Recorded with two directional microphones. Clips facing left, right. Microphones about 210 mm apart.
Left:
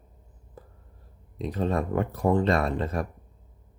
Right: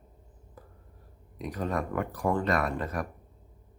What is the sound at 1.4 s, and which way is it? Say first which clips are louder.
Speech: left 4 dB; 25° left (ahead or behind).